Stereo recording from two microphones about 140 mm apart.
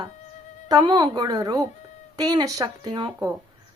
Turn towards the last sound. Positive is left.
turn(degrees=-35)  # may be behind; listen again after turning